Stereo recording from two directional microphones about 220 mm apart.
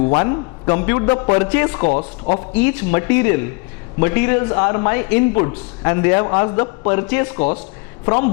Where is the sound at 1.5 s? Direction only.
15° left (ahead or behind).